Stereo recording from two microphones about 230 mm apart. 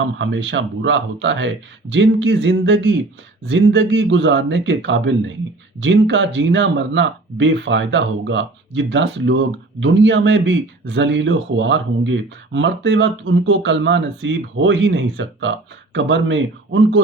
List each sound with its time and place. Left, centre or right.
0.0 s speech: right